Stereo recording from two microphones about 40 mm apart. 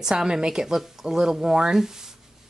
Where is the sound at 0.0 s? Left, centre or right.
Centre.